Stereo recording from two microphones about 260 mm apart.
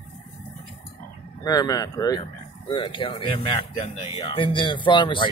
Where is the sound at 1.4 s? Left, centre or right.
Centre.